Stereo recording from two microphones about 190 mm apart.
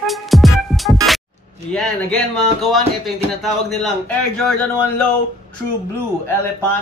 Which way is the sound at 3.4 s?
Centre (ahead or behind).